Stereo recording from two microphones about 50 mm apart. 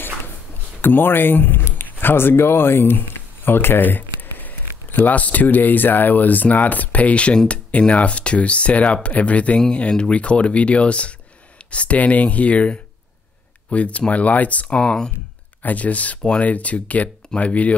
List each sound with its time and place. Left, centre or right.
0.7 s speech: left; by 15.1 s centre
15.6 s speech: left